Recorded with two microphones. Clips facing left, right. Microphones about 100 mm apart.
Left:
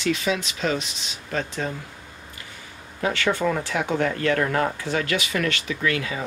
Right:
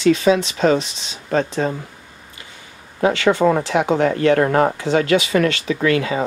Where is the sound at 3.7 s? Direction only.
25° right (ahead or behind).